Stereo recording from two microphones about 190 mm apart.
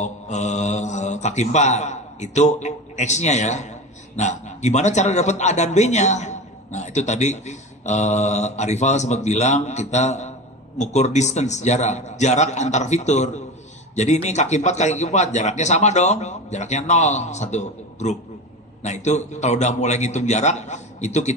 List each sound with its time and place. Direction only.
0.0 s mantra: 40° left (ahead or behind)
4.2 s a man's voice: 40° left (ahead or behind)